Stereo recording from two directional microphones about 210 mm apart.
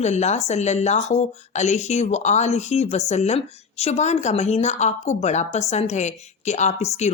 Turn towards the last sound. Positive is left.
turn(degrees=30)  # may be behind; listen again after turning